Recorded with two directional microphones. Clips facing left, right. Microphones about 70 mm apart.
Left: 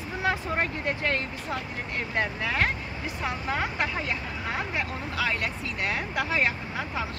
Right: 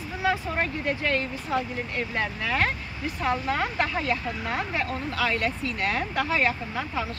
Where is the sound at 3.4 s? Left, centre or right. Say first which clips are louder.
Right 2 dB; centre.